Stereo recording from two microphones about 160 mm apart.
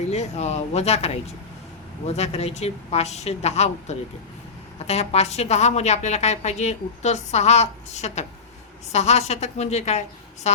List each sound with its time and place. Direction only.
0.0 s a woman's voice: 45° left (ahead or behind)